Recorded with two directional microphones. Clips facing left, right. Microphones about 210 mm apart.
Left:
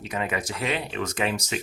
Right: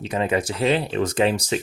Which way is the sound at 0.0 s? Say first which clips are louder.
Right 7 dB; 30° right (ahead or behind).